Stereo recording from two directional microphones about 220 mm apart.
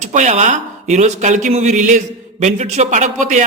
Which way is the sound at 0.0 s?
30° right (ahead or behind).